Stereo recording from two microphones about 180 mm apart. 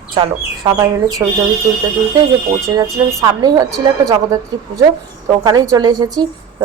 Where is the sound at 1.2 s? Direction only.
15° right (ahead or behind).